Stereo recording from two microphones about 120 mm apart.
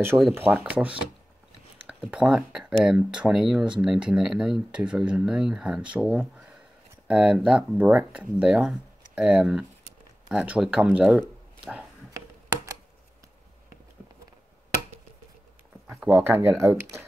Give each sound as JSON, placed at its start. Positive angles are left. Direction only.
{"t": 0.3, "sound": "speech", "side_deg": -15}
{"t": 15.9, "sound": "speech", "side_deg": -15}